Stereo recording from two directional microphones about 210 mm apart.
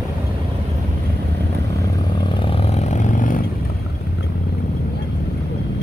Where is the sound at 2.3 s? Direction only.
25° left (ahead or behind).